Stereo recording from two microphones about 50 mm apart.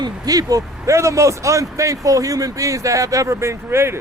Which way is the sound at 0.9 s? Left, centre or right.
Right.